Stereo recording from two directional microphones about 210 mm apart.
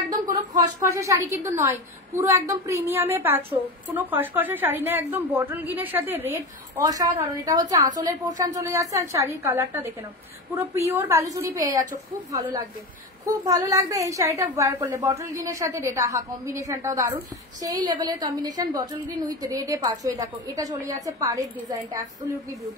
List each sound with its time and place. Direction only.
0.3 s a woman's voice: 15° right (ahead or behind)
13.2 s a woman's voice: 15° right (ahead or behind)